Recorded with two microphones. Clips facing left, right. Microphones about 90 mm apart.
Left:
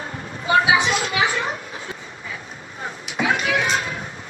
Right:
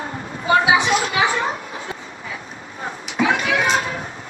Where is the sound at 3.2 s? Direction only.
35° right (ahead or behind).